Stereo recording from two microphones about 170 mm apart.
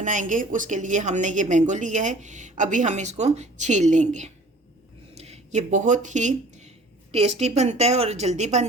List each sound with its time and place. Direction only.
0.0 s a woman's voice: 50° right (ahead or behind)